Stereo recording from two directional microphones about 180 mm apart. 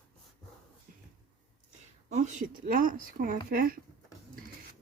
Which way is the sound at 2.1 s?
40° right (ahead or behind).